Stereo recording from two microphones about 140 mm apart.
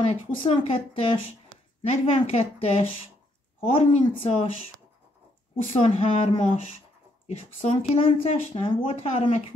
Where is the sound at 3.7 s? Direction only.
40° left (ahead or behind).